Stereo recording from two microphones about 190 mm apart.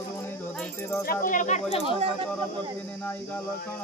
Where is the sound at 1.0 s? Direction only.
45° left (ahead or behind).